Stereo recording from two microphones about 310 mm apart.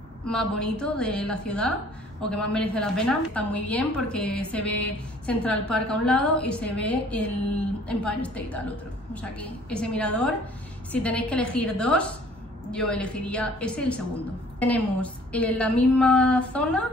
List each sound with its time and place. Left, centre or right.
0.3 s a woman's voice: centre